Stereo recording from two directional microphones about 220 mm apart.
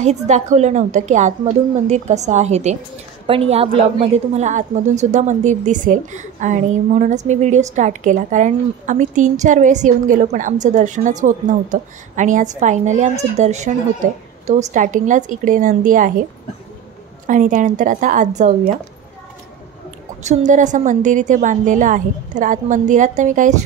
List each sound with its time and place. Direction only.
0.0 s a woman's voice: 30° right (ahead or behind)
17.3 s a woman's voice: 35° right (ahead or behind)
20.2 s a woman's voice: 35° right (ahead or behind)